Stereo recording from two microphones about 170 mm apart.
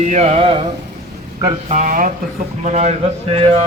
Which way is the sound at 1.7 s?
50° right (ahead or behind).